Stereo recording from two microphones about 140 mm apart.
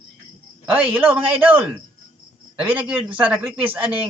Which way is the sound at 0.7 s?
10° right (ahead or behind).